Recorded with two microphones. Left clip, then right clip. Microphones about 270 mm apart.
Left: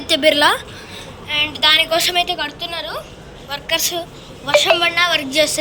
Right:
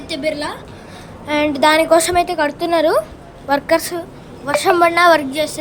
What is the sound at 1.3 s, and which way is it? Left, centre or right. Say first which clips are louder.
A woman's voice: right 1 dB; right.